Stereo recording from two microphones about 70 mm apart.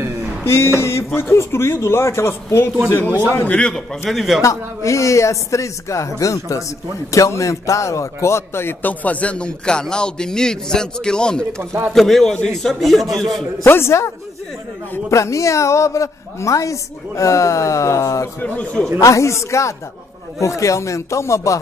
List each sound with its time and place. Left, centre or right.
0.5 s a man's voice: left
3.4 s a man's voice: centre
4.1 s a man's voice: centre
4.4 s a man's voice: left
9.0 s a man's voice: left; by 13.5 s centre
13.7 s a man's voice: left
18.4 s a man's voice: centre
18.9 s a man's voice: left